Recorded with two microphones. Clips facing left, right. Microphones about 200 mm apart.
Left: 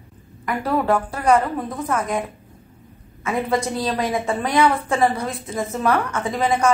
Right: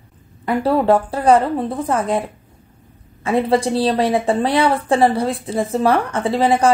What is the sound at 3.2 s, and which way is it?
A woman's voice, 30° right (ahead or behind).